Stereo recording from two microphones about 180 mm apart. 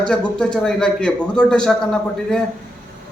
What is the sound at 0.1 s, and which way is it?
A man's voice, 5° left (ahead or behind).